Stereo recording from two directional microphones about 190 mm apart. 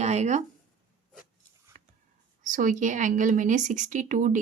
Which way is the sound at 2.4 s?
40° right (ahead or behind).